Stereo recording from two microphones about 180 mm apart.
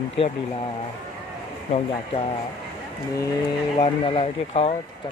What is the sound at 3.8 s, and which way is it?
Speech, 30° left (ahead or behind).